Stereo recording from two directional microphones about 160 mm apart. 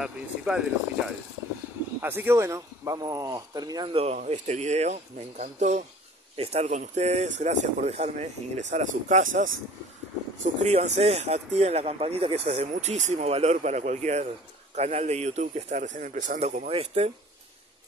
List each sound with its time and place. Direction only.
0.0 s speech: 5° right (ahead or behind); by 3.9 s 25° right (ahead or behind)
3.9 s speech: 40° right (ahead or behind); by 9.5 s 55° right (ahead or behind)
10.4 s speech: 45° right (ahead or behind)